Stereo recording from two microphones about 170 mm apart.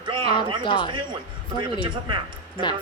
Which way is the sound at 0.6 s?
30° left (ahead or behind).